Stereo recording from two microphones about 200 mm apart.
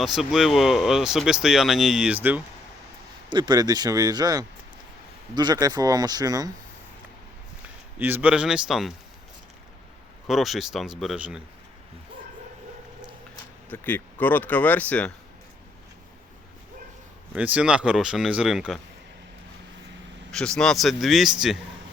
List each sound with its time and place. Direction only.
0.0 s speech: centre (ahead or behind)
3.2 s speech: 20° right (ahead or behind)
7.9 s speech: 10° right (ahead or behind)
10.2 s speech: centre (ahead or behind)
13.7 s speech: 10° left (ahead or behind)
17.3 s speech: 5° right (ahead or behind)
20.3 s speech: 5° left (ahead or behind)